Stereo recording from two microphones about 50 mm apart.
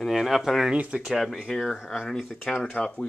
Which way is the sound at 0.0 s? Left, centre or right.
Centre.